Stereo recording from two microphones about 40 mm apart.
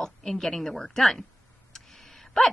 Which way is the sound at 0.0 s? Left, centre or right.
Centre.